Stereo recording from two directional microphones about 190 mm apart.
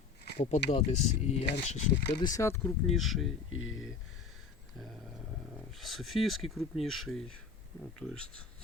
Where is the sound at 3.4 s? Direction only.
90° left.